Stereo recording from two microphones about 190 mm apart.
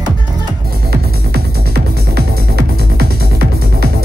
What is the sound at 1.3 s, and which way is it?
Music, 55° right (ahead or behind).